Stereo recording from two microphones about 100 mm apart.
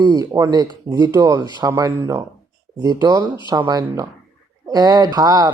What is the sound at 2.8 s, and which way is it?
Speech, 40° right (ahead or behind).